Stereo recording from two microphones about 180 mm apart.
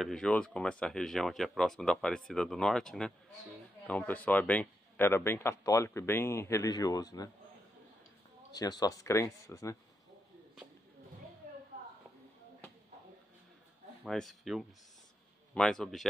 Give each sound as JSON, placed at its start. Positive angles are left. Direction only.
{"t": 0.0, "sound": "a man's voice", "side_deg": 5}
{"t": 8.5, "sound": "a man's voice", "side_deg": 20}
{"t": 14.0, "sound": "speech", "side_deg": 0}